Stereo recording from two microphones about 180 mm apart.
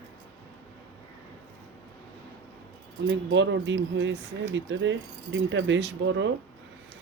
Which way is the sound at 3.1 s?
90° right.